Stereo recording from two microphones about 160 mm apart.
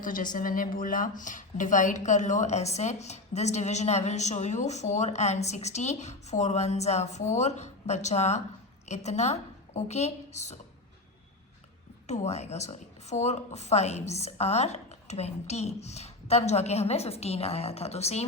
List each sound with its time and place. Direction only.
0.0 s a woman's voice: 60° left (ahead or behind)
12.0 s speech: 45° left (ahead or behind)